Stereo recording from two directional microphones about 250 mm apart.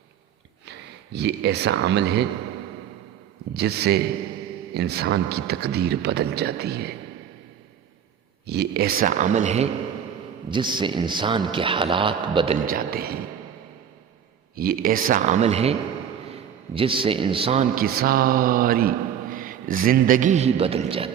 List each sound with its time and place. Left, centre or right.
1.1 s speech: right
3.5 s speech: right
8.4 s a man's voice: right; by 12.5 s centre
12.6 s speech: right
14.5 s speech: right